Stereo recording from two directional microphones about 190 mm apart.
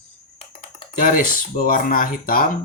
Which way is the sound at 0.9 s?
45° left (ahead or behind).